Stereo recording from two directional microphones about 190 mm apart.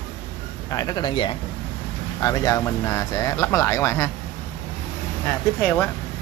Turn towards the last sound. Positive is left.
turn(degrees=10)  # may be behind; listen again after turning